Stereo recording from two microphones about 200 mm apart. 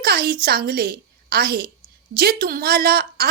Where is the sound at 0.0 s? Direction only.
50° right (ahead or behind).